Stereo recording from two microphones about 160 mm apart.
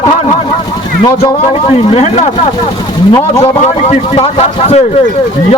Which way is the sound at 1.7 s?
40° left (ahead or behind).